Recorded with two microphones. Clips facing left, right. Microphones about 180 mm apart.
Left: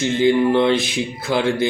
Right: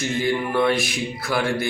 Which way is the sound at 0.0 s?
20° left (ahead or behind).